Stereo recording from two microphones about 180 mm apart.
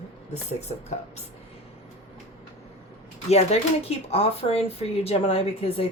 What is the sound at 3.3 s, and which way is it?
Speech, 35° left (ahead or behind).